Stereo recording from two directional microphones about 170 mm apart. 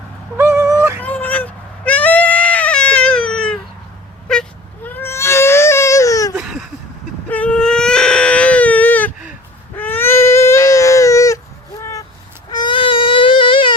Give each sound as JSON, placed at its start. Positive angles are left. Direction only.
{"t": 0.3, "sound": "a sound", "side_deg": -15}
{"t": 1.0, "sound": "goat", "side_deg": 10}
{"t": 4.3, "sound": "baby cry", "side_deg": 10}
{"t": 6.3, "sound": "a sound", "side_deg": -5}
{"t": 7.3, "sound": "baby cry", "side_deg": 10}
{"t": 11.8, "sound": "vehicle", "side_deg": 20}
{"t": 12.5, "sound": "baby cry", "side_deg": 25}